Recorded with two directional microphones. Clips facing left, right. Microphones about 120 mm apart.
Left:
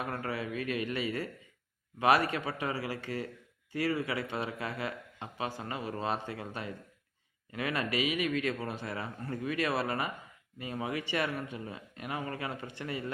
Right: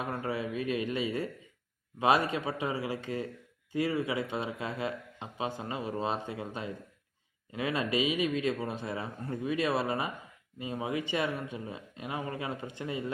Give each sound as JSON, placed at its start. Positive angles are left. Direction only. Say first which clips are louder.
{"t": 0.0, "sound": "a man's voice", "louder": "right 2 dB", "side_deg": -20}